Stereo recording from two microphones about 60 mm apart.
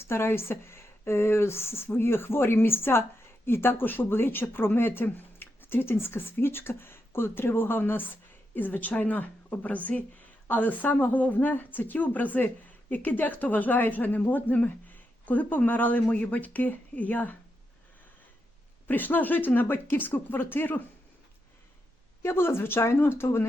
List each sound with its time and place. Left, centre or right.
0.0 s speech: left
18.9 s speech: left
22.2 s speech: left